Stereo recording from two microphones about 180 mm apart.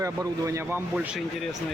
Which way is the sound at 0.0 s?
15° right (ahead or behind).